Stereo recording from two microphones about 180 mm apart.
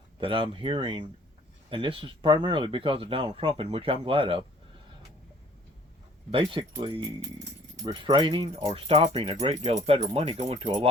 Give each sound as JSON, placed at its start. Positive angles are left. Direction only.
{"t": 0.2, "sound": "speech", "side_deg": -30}
{"t": 6.3, "sound": "speech", "side_deg": -30}